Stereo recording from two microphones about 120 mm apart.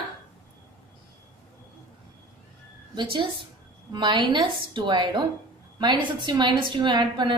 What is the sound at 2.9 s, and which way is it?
A woman's voice, 40° right (ahead or behind).